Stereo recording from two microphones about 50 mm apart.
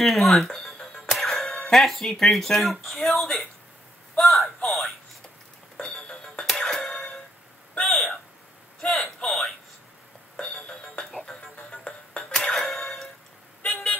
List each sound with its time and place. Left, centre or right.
0.0 s speech: centre
4.6 s speech: centre
5.8 s music: centre
6.4 s music: centre
7.8 s a sound: centre
8.8 s speech: centre
10.3 s music: left
12.1 s music: centre
13.7 s vehicle: centre